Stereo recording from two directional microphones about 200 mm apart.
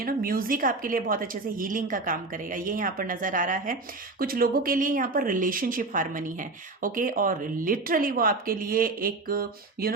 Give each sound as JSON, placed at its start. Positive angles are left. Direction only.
{"t": 0.0, "sound": "a woman's voice", "side_deg": -45}